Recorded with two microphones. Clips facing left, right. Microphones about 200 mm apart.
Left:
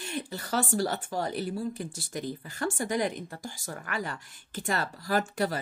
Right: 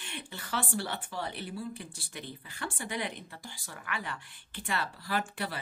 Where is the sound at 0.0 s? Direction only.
40° left (ahead or behind).